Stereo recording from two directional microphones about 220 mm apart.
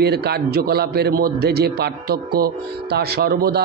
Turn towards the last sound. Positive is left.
turn(degrees=-45)  # may be behind; listen again after turning